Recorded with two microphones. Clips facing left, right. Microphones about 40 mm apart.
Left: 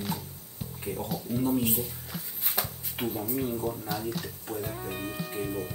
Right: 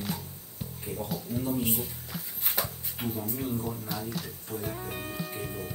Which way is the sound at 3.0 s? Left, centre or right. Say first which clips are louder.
Left 2 dB; left.